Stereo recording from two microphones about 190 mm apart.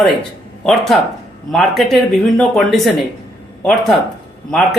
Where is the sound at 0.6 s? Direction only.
Centre (ahead or behind).